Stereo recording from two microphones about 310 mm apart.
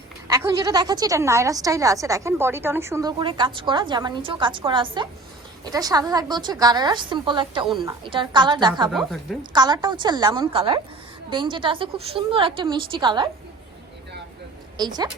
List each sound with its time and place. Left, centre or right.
0.3 s a woman's voice: centre
7.7 s a woman's voice: centre
8.0 s a woman's voice: centre
8.9 s a woman's voice: centre
9.4 s a woman's voice: centre
14.8 s a woman's voice: centre